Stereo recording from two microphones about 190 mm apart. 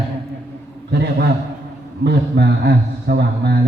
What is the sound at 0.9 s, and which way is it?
A man's voice, 60° right (ahead or behind).